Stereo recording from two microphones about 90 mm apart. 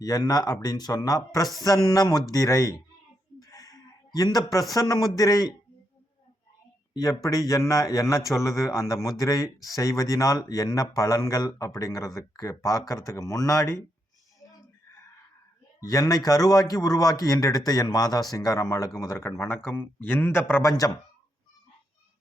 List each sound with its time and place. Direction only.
0.0 s speech: 45° left (ahead or behind)
3.4 s a sound: 45° left (ahead or behind)
4.7 s speech: 40° left (ahead or behind)
6.9 s speech: 40° left (ahead or behind)
15.8 s speech: 40° left (ahead or behind)